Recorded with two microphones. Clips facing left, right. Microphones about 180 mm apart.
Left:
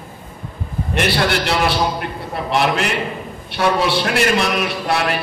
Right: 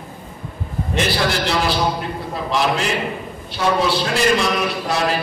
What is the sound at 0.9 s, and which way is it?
A man's voice, 65° left (ahead or behind).